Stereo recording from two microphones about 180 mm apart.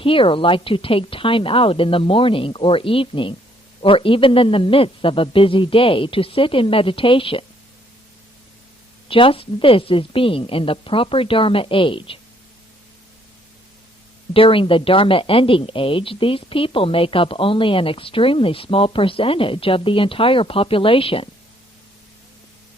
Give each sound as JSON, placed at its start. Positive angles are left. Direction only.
{"t": 0.0, "sound": "speech", "side_deg": 30}
{"t": 9.0, "sound": "speech", "side_deg": 30}
{"t": 14.3, "sound": "speech", "side_deg": 30}